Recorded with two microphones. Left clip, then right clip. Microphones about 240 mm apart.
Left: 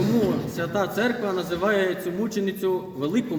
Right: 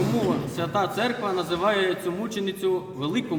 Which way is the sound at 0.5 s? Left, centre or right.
Centre.